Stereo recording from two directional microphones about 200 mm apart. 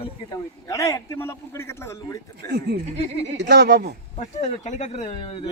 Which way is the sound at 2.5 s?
55° right (ahead or behind).